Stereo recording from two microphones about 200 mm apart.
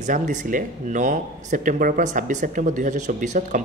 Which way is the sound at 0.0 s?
40° right (ahead or behind).